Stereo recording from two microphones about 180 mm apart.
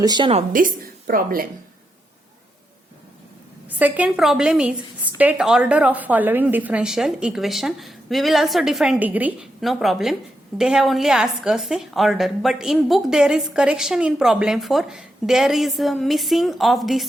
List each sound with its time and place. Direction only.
0.0 s a woman's voice: 25° right (ahead or behind)
0.5 s a woman's voice: 50° right (ahead or behind)
3.8 s a woman's voice: 10° right (ahead or behind)